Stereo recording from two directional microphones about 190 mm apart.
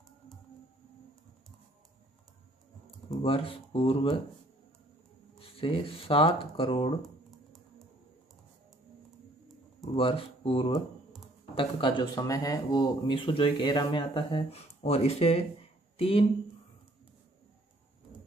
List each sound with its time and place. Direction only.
3.2 s speech: 30° left (ahead or behind)
5.4 s speech: 30° left (ahead or behind)
9.9 s speech: 30° left (ahead or behind)